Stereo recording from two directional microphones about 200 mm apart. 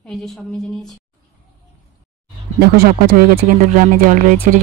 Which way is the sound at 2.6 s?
50° right (ahead or behind).